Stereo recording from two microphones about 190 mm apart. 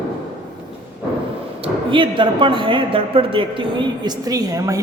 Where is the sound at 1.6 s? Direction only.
25° right (ahead or behind).